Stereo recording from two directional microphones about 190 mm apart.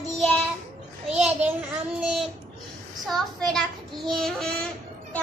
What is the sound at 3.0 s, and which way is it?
A child's voice, centre (ahead or behind).